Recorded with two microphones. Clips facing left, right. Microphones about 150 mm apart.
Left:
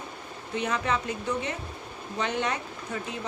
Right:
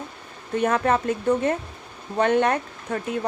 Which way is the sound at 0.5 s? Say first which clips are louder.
Right 7 dB; 50° right (ahead or behind).